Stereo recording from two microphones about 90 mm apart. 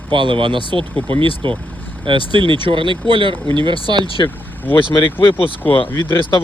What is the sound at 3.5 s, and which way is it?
Speech, 55° right (ahead or behind).